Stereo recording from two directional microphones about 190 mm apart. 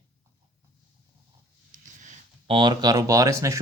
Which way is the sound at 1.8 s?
40° right (ahead or behind).